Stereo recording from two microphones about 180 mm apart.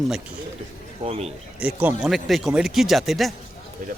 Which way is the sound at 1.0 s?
35° right (ahead or behind).